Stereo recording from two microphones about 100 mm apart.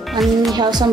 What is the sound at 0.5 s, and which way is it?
Speech, 45° right (ahead or behind).